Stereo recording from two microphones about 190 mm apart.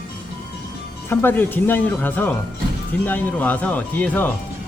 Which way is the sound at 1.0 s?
10° left (ahead or behind).